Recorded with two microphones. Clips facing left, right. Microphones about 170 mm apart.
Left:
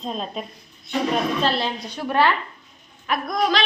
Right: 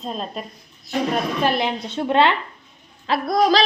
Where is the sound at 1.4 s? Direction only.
15° right (ahead or behind).